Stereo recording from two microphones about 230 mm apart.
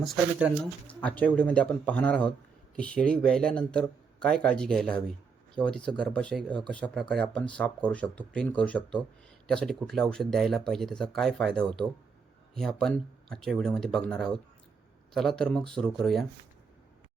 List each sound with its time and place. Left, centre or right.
0.0 s speech: centre